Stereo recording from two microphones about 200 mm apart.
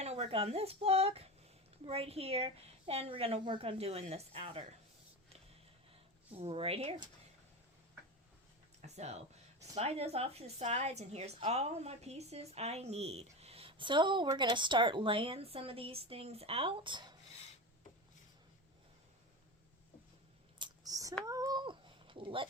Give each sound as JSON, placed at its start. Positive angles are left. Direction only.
{"t": 0.0, "sound": "a woman's voice", "side_deg": -30}
{"t": 5.9, "sound": "speech", "side_deg": -30}
{"t": 9.0, "sound": "a woman's voice", "side_deg": -35}
{"t": 20.6, "sound": "whispering", "side_deg": -20}
{"t": 21.2, "sound": "a sound", "side_deg": -20}